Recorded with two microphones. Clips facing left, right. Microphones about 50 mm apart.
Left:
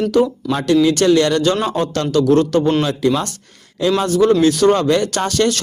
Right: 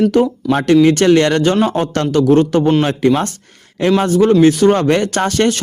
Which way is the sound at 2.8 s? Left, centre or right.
Right.